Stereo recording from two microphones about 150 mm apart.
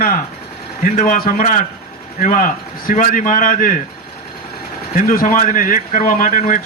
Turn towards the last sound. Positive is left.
turn(degrees=60)  # may be behind; listen again after turning